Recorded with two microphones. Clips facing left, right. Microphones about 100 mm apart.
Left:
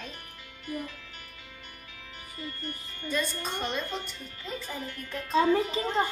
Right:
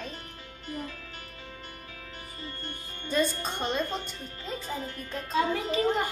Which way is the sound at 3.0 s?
30° right (ahead or behind).